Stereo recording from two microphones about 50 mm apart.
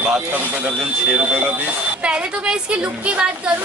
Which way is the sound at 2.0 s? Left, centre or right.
Right.